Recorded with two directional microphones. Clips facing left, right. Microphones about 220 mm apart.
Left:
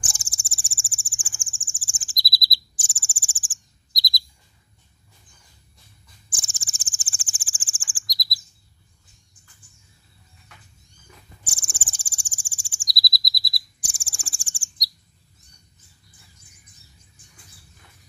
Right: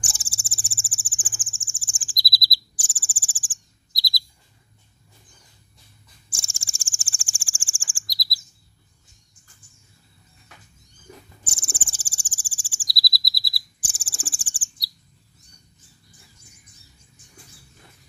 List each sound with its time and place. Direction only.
0.1 s cricket: 5° right (ahead or behind)
2.0 s chirp: 25° left (ahead or behind)
3.9 s bird: 20° left (ahead or behind)
6.3 s cricket: 20° left (ahead or behind)
7.5 s bird vocalization: 20° left (ahead or behind)
11.4 s bird: 10° left (ahead or behind)
12.5 s cricket: centre (ahead or behind)